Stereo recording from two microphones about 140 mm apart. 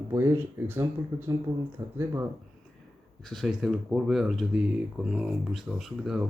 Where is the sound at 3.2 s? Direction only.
Centre (ahead or behind).